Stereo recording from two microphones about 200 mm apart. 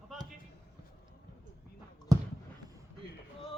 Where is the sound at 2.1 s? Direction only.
15° right (ahead or behind).